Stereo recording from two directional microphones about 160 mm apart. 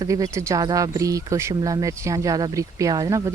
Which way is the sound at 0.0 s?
20° right (ahead or behind).